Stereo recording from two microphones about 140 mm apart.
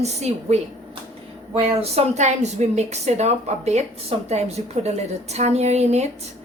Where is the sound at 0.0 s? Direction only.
50° right (ahead or behind).